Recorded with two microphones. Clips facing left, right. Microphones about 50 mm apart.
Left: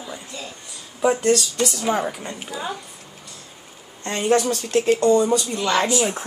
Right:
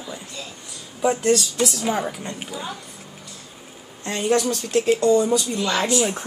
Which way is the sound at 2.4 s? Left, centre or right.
Centre.